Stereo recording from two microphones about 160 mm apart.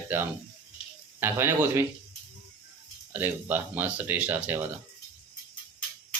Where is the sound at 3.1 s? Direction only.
10° right (ahead or behind).